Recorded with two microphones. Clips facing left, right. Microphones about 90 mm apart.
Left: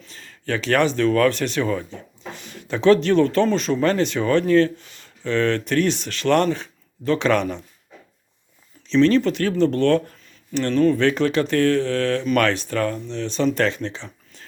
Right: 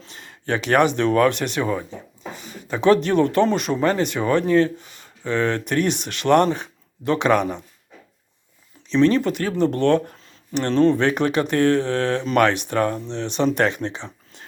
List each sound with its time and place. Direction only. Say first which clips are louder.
0.0 s speech: even; 20° right (ahead or behind)
2.3 s speech: left 1 dB; 5° right (ahead or behind)
8.9 s speech: left 1 dB; 15° right (ahead or behind)
13.8 s a sound: right 2 dB; 20° right (ahead or behind)